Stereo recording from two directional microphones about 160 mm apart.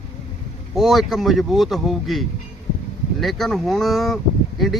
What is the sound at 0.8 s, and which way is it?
Speech, centre (ahead or behind).